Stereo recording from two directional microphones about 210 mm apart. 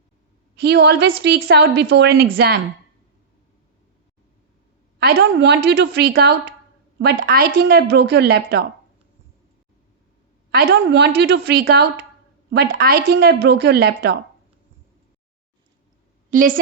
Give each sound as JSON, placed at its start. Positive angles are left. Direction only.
{"t": 0.6, "sound": "a woman's voice", "side_deg": -50}
{"t": 4.9, "sound": "a woman's voice", "side_deg": -50}
{"t": 10.5, "sound": "a woman's voice", "side_deg": -50}
{"t": 16.3, "sound": "a woman's voice", "side_deg": -40}